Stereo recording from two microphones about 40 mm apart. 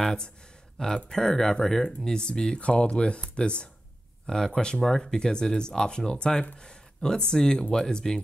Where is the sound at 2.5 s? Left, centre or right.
Left; by 8.2 s centre.